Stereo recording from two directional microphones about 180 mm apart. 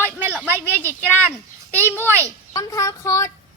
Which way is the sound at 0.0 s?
10° right (ahead or behind).